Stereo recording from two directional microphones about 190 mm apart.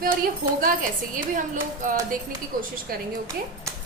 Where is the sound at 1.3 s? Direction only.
45° right (ahead or behind).